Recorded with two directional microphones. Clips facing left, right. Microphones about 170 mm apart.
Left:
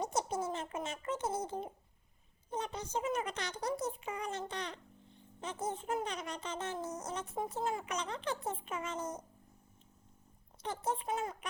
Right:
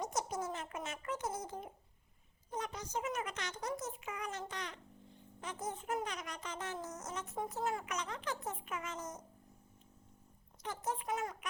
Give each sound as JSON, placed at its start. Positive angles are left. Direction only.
{"t": 0.0, "sound": "a sound", "side_deg": 30}
{"t": 2.5, "sound": "a woman's voice", "side_deg": 30}
{"t": 10.8, "sound": "speech", "side_deg": 30}